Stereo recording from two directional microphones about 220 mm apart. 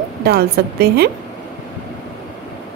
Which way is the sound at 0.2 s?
45° right (ahead or behind).